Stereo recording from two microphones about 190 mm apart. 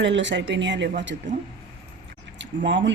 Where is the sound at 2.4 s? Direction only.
70° right (ahead or behind).